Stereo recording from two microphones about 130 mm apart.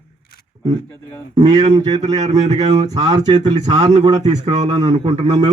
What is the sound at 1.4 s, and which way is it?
Speech, 50° right (ahead or behind).